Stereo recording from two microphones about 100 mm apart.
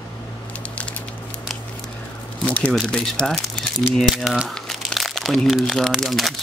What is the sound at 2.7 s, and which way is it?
Speech, 5° left (ahead or behind).